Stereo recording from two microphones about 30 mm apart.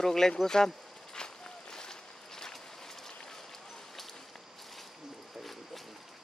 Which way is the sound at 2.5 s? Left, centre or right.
Centre.